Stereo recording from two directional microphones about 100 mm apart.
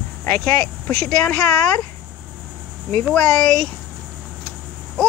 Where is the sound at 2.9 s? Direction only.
5° left (ahead or behind).